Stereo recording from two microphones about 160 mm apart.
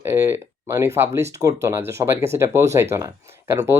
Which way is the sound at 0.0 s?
15° right (ahead or behind).